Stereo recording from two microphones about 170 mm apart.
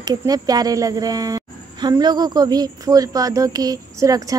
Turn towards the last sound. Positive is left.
turn(degrees=-20)  # may be behind; listen again after turning